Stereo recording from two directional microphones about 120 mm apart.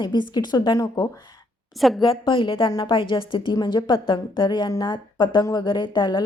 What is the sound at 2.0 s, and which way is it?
A woman's voice, 45° left (ahead or behind).